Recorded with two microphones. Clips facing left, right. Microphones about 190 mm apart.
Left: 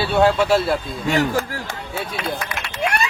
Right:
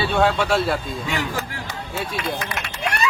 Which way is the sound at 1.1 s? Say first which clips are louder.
Left 9 dB; 45° left (ahead or behind).